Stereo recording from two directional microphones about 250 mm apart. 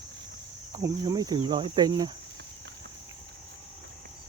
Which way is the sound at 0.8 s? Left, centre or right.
Centre.